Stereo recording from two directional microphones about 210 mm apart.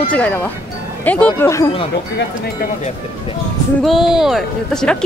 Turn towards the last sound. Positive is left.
turn(degrees=0)  # may be behind; listen again after turning